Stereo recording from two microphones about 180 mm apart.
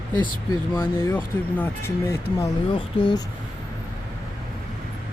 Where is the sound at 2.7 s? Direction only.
25° left (ahead or behind).